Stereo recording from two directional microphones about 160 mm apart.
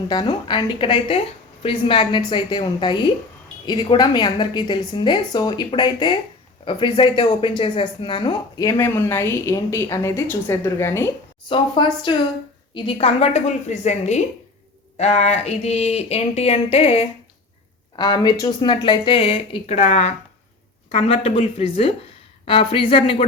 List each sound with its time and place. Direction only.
0.1 s a woman's voice: 25° left (ahead or behind)
8.8 s a woman's voice: 15° left (ahead or behind)
11.4 s a woman's voice: 30° left (ahead or behind)
17.9 s speech: 25° left (ahead or behind)